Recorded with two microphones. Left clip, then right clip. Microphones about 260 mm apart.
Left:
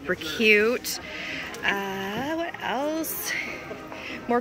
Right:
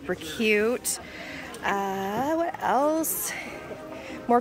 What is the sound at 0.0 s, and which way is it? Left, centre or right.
Speech, centre.